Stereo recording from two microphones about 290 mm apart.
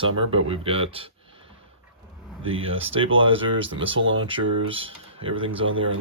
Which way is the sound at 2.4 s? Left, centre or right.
Right.